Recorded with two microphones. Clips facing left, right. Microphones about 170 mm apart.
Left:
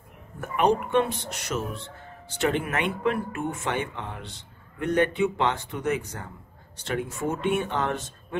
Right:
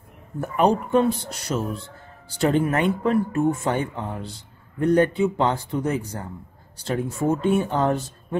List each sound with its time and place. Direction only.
0.4 s speech: 35° right (ahead or behind)